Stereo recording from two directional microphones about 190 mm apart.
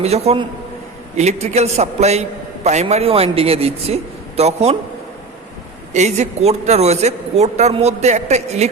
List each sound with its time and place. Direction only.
0.0 s a man's voice: 35° right (ahead or behind)
5.9 s a man's voice: 35° right (ahead or behind)